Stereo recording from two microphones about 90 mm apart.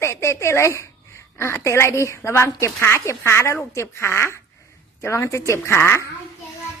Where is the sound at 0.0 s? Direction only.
30° left (ahead or behind).